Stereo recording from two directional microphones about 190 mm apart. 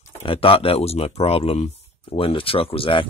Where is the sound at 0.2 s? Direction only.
30° left (ahead or behind).